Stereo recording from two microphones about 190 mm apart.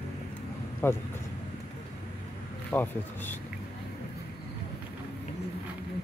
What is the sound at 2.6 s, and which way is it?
Speech, 10° left (ahead or behind).